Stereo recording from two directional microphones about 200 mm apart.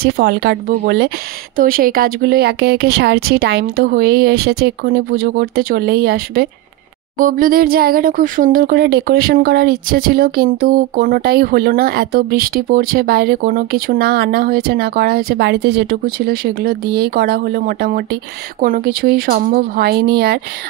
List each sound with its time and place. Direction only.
0.0 s speech: 55° right (ahead or behind)